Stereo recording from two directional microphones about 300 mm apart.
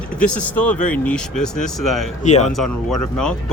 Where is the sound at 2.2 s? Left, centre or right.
Left.